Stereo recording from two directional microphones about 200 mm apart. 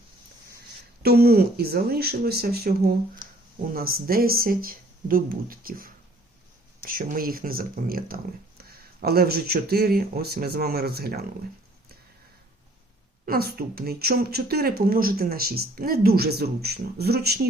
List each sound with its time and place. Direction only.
1.0 s speech: 50° right (ahead or behind)
13.2 s speech: 50° right (ahead or behind)